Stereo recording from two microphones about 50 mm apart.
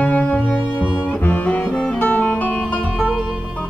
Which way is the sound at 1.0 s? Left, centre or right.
Left.